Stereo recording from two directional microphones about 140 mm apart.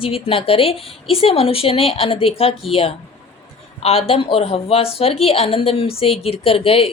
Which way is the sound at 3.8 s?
45° left (ahead or behind).